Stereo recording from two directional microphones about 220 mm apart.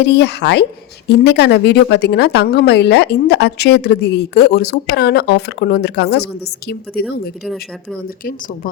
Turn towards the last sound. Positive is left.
turn(degrees=0)  # may be behind; listen again after turning